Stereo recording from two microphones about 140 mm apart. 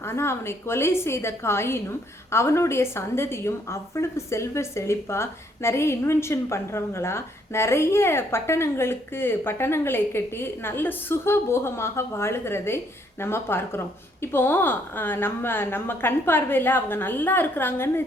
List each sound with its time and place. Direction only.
0.0 s a woman's voice: 20° left (ahead or behind)